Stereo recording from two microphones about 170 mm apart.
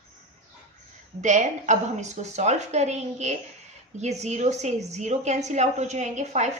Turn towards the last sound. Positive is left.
turn(degrees=-45)  # may be behind; listen again after turning